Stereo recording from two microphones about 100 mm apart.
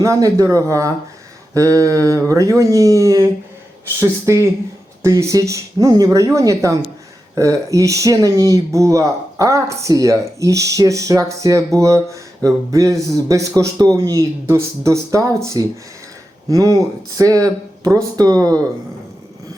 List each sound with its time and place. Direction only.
0.0 s speech: 35° right (ahead or behind)